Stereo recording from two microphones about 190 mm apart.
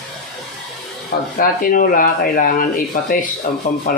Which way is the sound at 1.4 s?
50° left (ahead or behind).